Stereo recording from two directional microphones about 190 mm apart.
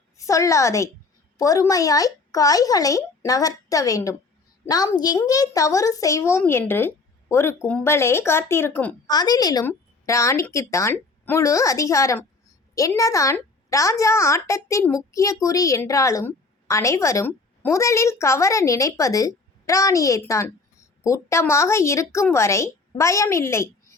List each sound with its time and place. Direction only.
0.2 s a woman's voice: 15° left (ahead or behind)
9.0 s a woman's voice: 20° left (ahead or behind)